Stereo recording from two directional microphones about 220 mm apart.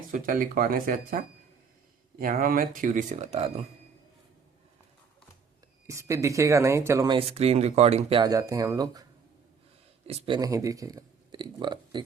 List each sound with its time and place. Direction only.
0.1 s speech: 40° right (ahead or behind)
5.8 s speech: 15° right (ahead or behind); by 8.2 s 30° right (ahead or behind)
8.2 s speech: 15° right (ahead or behind)
10.1 s speech: 25° right (ahead or behind)